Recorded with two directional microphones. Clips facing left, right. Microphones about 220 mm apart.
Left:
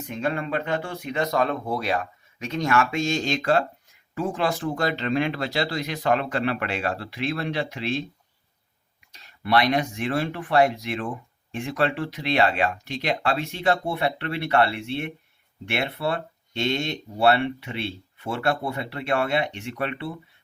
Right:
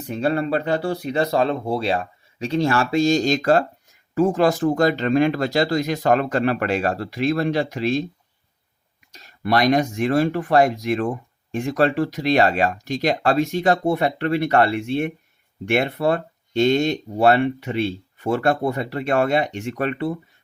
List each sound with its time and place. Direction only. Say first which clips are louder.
0.0 s speech: right 6 dB; 35° right (ahead or behind)
9.1 s speech: right 2 dB; 45° right (ahead or behind)